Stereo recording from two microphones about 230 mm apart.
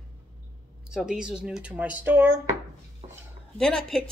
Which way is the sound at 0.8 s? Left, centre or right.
Centre.